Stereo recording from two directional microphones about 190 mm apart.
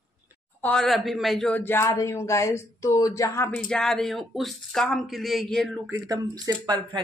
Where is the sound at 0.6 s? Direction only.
5° left (ahead or behind).